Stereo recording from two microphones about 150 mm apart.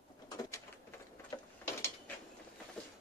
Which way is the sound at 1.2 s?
20° left (ahead or behind).